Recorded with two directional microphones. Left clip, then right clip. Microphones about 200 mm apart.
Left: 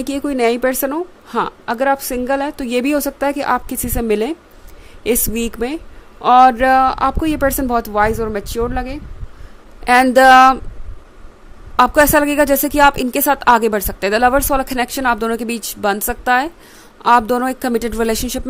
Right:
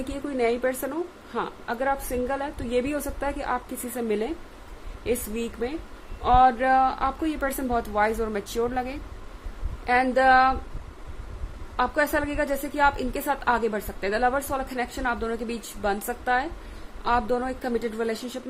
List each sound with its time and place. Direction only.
0.0 s a woman's voice: 50° left (ahead or behind)
9.8 s a woman's voice: 50° left (ahead or behind)
11.8 s a woman's voice: 55° left (ahead or behind)